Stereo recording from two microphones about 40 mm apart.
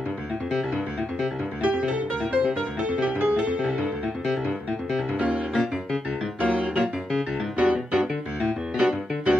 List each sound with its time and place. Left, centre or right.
1.6 s music: right
4.3 s music: centre
6.4 s music: right